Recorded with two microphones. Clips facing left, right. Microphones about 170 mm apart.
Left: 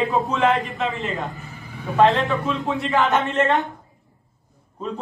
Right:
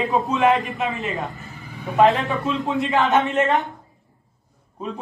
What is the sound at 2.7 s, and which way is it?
Speech, 20° right (ahead or behind).